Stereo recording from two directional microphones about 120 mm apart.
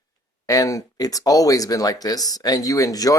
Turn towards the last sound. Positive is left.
turn(degrees=30)  # may be behind; listen again after turning